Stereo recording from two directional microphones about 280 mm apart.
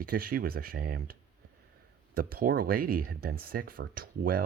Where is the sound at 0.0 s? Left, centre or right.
Right.